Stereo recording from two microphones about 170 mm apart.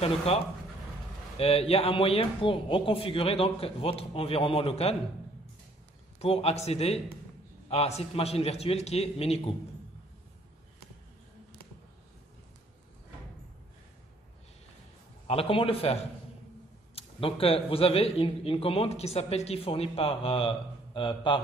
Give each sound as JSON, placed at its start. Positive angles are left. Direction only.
{"t": 0.0, "sound": "speech", "side_deg": 35}
{"t": 1.4, "sound": "speech", "side_deg": 35}
{"t": 6.1, "sound": "speech", "side_deg": 35}
{"t": 15.2, "sound": "speech", "side_deg": 35}